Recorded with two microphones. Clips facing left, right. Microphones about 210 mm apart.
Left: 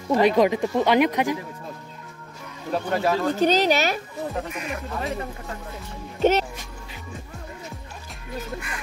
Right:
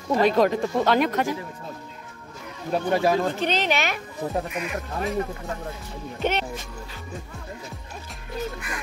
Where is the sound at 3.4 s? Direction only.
40° left (ahead or behind).